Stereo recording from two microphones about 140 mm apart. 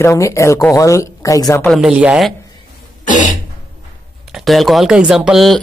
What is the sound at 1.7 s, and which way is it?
Speech, 5° right (ahead or behind).